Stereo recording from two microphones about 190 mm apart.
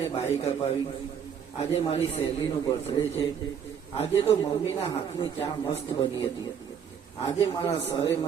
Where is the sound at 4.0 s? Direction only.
30° left (ahead or behind).